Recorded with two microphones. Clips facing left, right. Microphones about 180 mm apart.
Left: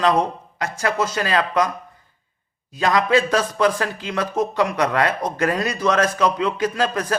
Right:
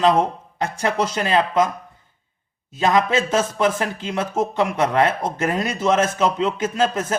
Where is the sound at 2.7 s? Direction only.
20° right (ahead or behind).